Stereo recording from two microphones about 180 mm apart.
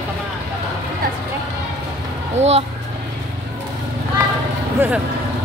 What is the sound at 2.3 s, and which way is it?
Speech, 35° right (ahead or behind).